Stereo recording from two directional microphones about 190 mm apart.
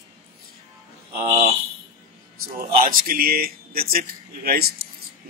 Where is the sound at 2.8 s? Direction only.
50° right (ahead or behind).